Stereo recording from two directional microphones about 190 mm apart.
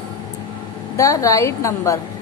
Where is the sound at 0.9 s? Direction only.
15° left (ahead or behind).